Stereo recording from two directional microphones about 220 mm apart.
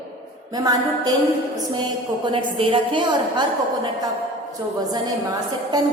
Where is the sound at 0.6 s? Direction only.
15° right (ahead or behind).